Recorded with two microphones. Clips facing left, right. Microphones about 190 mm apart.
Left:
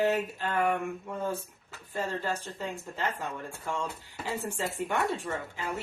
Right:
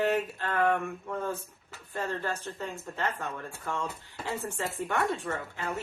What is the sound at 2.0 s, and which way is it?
Speech, 10° left (ahead or behind).